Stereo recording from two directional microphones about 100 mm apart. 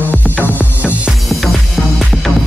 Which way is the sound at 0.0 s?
20° left (ahead or behind).